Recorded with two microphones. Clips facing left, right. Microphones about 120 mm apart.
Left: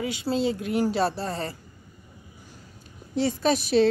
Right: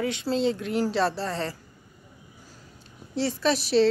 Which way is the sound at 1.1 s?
40° left (ahead or behind).